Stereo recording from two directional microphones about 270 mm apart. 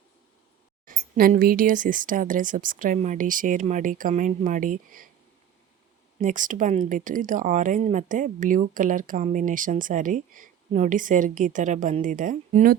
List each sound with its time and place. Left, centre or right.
0.9 s speech: right
6.1 s speech: right